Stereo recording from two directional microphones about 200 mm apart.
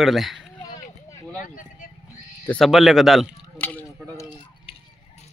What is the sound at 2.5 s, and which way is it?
Speech, centre (ahead or behind).